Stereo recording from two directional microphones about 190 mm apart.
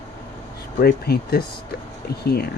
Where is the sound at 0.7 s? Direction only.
55° left (ahead or behind).